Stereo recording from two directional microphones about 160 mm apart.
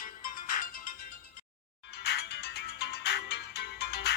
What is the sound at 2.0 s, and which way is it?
Music, 90° left.